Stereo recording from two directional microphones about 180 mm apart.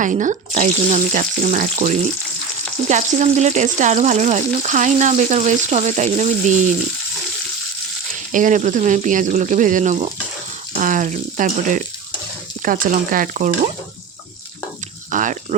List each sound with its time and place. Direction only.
0.0 s speech: 45° right (ahead or behind)
8.3 s speech: 45° right (ahead or behind)
15.1 s a sound: 45° right (ahead or behind)